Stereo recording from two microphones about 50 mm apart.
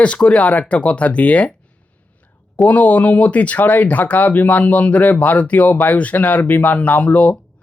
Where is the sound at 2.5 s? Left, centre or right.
Left.